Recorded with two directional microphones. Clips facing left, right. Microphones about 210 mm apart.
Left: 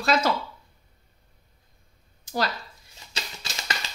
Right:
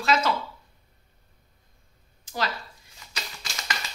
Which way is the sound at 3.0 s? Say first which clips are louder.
Even; 30° left (ahead or behind).